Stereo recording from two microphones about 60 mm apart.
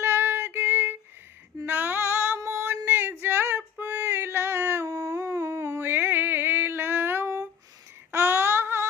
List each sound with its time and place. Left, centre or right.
0.0 s music: right
1.6 s female singing: right
2.4 s female singing: right
8.1 s a sound: right